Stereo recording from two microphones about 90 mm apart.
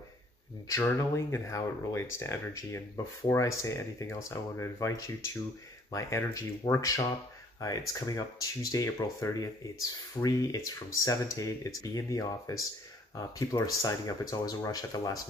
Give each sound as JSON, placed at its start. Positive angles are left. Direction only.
{"t": 0.7, "sound": "speech", "side_deg": 35}